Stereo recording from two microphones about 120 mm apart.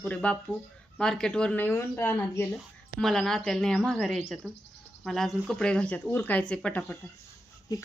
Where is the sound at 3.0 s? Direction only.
5° left (ahead or behind).